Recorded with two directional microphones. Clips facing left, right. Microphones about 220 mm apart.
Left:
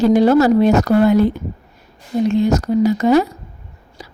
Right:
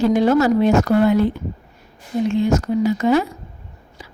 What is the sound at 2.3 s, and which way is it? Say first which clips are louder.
Speech: left 2 dB; 40° left (ahead or behind).